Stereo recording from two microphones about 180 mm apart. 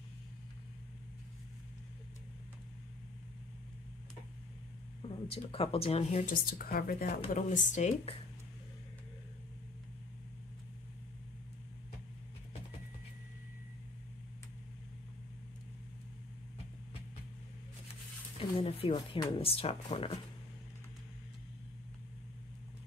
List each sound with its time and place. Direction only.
5.0 s speech: 30° left (ahead or behind)
6.2 s speech: 55° left (ahead or behind)
7.4 s speech: 45° left (ahead or behind)
18.5 s speech: 30° left (ahead or behind)